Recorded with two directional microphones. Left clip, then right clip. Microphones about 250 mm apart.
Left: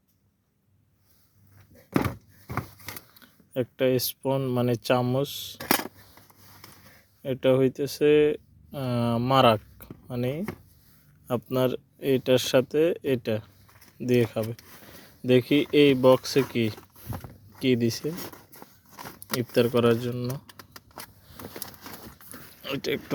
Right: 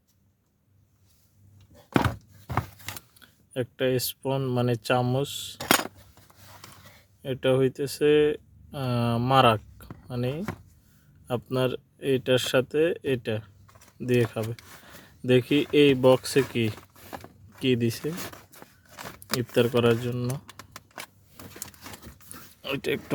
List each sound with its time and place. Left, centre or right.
3.2 s speech: centre
7.2 s speech: centre
19.4 s speech: centre
22.6 s speech: centre